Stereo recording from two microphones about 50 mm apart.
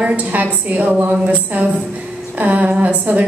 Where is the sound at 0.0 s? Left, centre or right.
Right.